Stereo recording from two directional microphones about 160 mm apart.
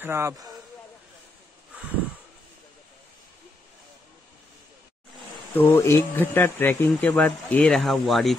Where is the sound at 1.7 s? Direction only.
10° right (ahead or behind).